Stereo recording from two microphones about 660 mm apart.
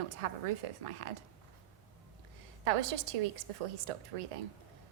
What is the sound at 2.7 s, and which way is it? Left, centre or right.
A woman's voice, right.